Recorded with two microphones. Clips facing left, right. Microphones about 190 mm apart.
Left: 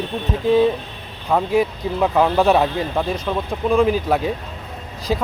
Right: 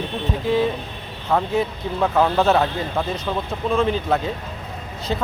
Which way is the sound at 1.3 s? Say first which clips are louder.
Left 3 dB; 10° left (ahead or behind).